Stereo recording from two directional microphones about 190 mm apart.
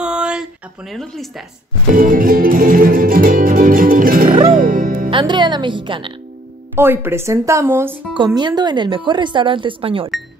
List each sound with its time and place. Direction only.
0.0 s a sound: 5° right (ahead or behind)
2.0 s music: 45° right (ahead or behind)
5.1 s speech: 25° right (ahead or behind)
6.7 s speech: 10° right (ahead or behind); by 10.1 s 30° right (ahead or behind)